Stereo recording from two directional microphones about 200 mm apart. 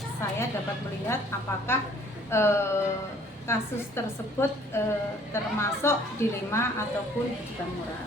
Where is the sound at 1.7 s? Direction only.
10° left (ahead or behind).